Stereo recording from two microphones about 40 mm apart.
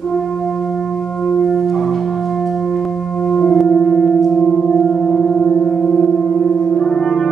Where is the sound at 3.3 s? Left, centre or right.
Left.